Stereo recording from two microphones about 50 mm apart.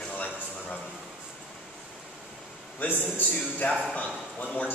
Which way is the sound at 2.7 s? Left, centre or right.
Left.